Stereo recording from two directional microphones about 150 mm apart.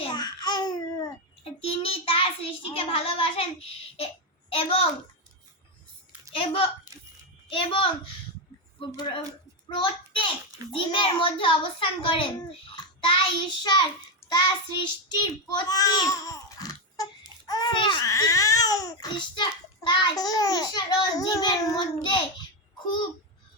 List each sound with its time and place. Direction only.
0.0 s babbling: 30° left (ahead or behind)
1.6 s child singing: 40° left (ahead or behind)
6.3 s a child's voice: 40° left (ahead or behind)
14.2 s babbling: 30° left (ahead or behind)